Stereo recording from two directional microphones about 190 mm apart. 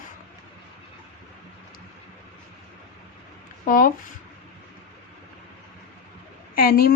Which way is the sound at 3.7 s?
45° left (ahead or behind).